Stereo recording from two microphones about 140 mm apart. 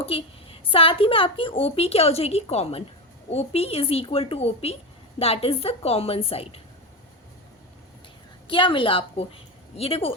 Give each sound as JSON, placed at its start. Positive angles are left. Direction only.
{"t": 0.0, "sound": "a woman's voice", "side_deg": 40}
{"t": 8.4, "sound": "a woman's voice", "side_deg": 35}